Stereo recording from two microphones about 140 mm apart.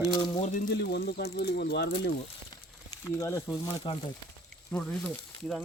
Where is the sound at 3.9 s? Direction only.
35° left (ahead or behind).